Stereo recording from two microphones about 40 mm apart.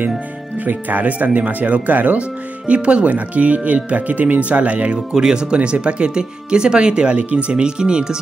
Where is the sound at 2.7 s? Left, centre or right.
Right.